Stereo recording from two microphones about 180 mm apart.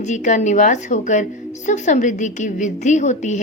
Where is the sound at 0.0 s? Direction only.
40° left (ahead or behind).